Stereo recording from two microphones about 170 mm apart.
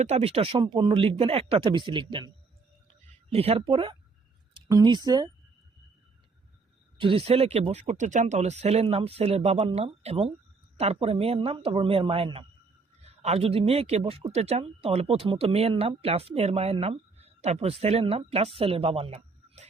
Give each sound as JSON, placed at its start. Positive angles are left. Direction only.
{"t": 0.0, "sound": "speech", "side_deg": -35}
{"t": 3.3, "sound": "speech", "side_deg": -35}
{"t": 7.0, "sound": "a man's voice", "side_deg": -35}